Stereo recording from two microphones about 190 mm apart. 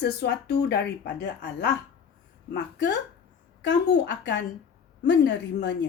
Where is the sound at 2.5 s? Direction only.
65° left (ahead or behind).